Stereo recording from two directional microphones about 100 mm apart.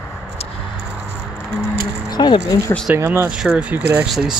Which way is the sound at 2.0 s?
45° left (ahead or behind).